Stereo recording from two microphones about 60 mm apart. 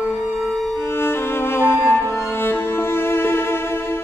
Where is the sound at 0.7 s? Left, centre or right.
Left.